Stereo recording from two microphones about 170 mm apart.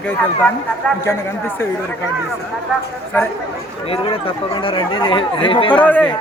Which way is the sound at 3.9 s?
35° left (ahead or behind).